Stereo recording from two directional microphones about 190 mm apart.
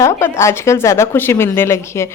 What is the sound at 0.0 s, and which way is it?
Speech, 15° left (ahead or behind).